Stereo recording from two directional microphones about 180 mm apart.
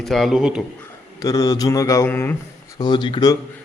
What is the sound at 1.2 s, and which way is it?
Speech, 20° left (ahead or behind).